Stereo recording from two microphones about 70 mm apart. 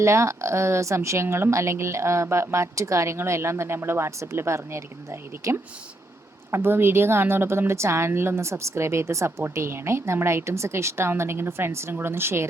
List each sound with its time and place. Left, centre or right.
0.0 s speech: right
5.4 s speech: right
6.5 s speech: right